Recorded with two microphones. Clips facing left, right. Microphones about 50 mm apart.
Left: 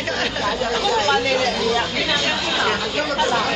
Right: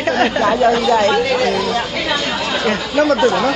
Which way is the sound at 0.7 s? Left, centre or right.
Centre.